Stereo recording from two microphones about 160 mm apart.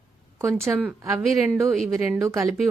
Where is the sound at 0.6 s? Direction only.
15° right (ahead or behind).